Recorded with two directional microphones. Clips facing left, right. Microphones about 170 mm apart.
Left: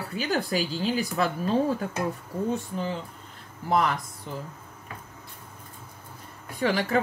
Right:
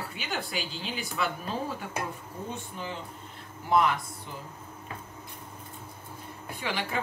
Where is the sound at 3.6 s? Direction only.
40° left (ahead or behind).